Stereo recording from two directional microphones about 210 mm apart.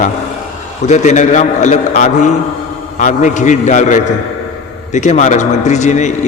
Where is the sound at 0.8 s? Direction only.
35° left (ahead or behind).